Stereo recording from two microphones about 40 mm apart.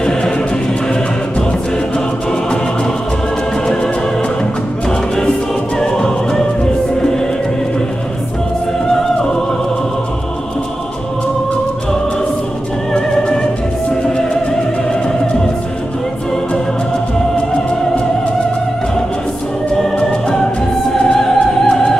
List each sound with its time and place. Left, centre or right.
3.6 s music: centre
12.9 s music: left
20.9 s opera: centre